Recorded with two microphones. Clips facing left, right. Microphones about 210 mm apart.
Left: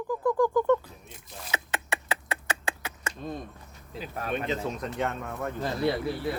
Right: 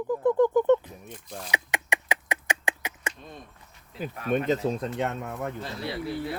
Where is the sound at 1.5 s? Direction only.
15° right (ahead or behind).